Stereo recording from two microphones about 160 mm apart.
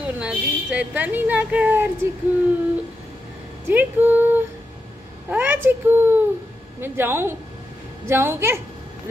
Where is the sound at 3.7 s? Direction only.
10° right (ahead or behind).